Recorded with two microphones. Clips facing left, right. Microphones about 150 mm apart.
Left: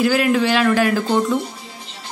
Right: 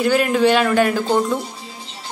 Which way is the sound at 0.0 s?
Centre (ahead or behind).